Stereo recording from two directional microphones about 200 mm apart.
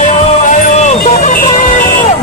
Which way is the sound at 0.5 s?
40° left (ahead or behind).